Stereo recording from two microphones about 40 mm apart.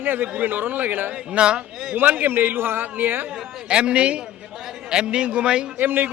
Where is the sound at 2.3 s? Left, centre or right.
Right.